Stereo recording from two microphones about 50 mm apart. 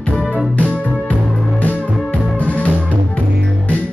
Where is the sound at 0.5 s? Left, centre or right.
Left.